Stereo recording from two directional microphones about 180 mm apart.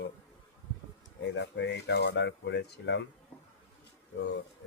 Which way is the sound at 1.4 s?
75° left (ahead or behind).